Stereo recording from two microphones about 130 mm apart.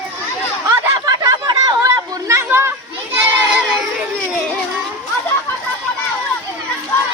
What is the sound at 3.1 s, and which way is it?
Children playing, 15° right (ahead or behind).